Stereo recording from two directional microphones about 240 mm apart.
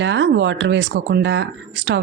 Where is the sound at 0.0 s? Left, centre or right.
Right.